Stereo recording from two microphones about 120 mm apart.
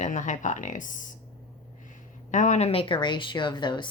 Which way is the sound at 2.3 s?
90° left.